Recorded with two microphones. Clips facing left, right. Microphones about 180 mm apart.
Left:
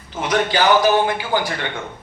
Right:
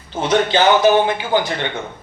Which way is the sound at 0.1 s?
25° right (ahead or behind).